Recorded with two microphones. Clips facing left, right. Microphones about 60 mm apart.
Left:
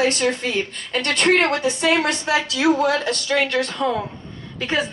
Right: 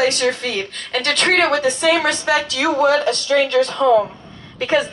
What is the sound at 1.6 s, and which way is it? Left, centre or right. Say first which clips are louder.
A woman's voice: right 3 dB; right.